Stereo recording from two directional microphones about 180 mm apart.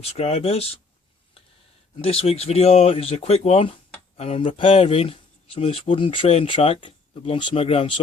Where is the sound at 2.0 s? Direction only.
35° left (ahead or behind).